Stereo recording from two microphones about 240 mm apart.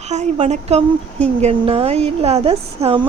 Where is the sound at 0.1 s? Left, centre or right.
Right.